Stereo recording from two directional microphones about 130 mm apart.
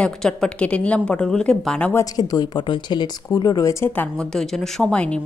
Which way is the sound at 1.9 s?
30° left (ahead or behind).